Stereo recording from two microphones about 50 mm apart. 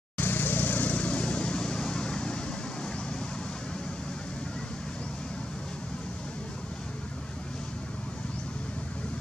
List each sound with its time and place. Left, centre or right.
0.2 s vehicle: left; by 2.5 s centre